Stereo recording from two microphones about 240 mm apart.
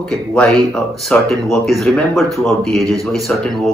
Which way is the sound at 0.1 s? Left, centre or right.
Centre.